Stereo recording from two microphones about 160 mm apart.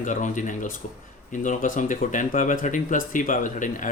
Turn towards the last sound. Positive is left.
turn(degrees=55)  # may be behind; listen again after turning